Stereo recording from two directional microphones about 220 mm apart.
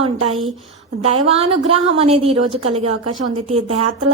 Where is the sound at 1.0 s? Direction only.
30° right (ahead or behind).